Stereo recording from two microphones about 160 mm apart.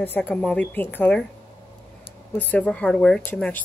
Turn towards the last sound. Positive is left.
turn(degrees=10)  # may be behind; listen again after turning